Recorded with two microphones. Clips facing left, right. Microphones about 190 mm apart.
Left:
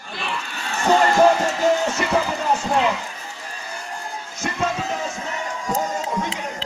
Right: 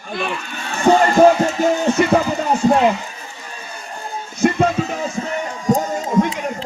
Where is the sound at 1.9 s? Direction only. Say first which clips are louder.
Right 7 dB; 55° right (ahead or behind).